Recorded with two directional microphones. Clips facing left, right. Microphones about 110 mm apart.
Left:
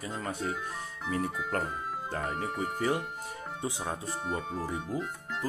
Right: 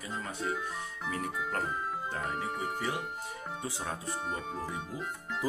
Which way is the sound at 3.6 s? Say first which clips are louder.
Left 4 dB; 20° left (ahead or behind).